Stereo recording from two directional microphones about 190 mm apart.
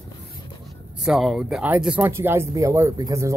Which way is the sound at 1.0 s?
Centre (ahead or behind).